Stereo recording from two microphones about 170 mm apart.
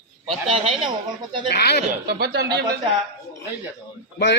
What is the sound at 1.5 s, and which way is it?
Speech, 70° left (ahead or behind).